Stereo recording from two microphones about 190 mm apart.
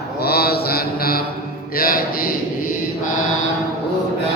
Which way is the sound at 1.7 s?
50° left (ahead or behind).